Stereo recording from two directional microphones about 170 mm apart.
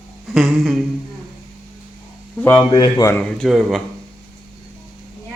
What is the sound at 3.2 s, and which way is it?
Speech, 5° left (ahead or behind).